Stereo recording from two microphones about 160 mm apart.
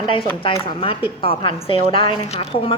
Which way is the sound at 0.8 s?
35° left (ahead or behind).